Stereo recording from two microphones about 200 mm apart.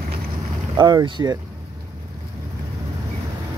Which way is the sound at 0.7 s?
20° right (ahead or behind).